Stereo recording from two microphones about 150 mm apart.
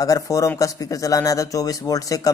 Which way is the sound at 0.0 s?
25° left (ahead or behind).